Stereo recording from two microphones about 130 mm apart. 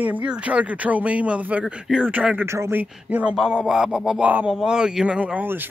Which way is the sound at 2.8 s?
10° right (ahead or behind).